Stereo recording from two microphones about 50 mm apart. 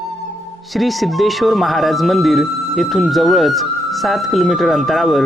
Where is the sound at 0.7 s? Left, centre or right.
Centre.